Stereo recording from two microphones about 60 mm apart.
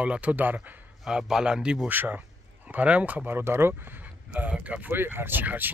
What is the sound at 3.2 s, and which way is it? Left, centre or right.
Speech, right.